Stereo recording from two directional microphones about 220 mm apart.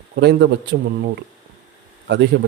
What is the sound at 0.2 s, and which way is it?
Speech, 50° right (ahead or behind).